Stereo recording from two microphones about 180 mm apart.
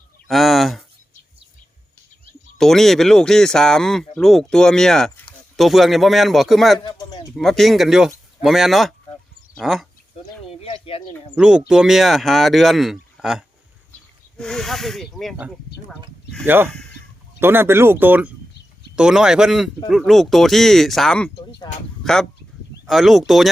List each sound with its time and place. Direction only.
0.3 s a sound: centre (ahead or behind)
2.6 s speech: centre (ahead or behind)
10.4 s a sound: 35° left (ahead or behind)
11.3 s speech: 5° right (ahead or behind)
17.4 s speech: 10° right (ahead or behind); by 21.2 s 5° left (ahead or behind)
21.7 s speech: 25° left (ahead or behind)
22.0 s speech: 5° left (ahead or behind)